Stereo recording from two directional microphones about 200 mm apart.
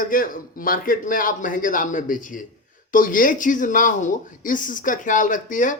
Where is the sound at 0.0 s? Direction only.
45° left (ahead or behind).